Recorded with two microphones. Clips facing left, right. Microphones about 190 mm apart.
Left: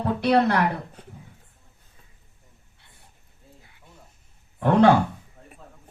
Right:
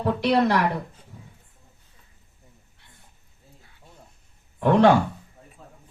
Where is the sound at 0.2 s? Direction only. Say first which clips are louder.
Left 2 dB; 60° left (ahead or behind).